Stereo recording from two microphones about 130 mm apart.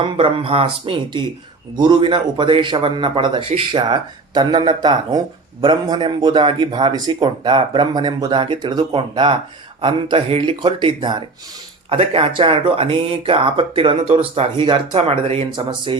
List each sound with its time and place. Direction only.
0.0 s speech: 45° right (ahead or behind)
1.7 s a man's voice: 35° right (ahead or behind)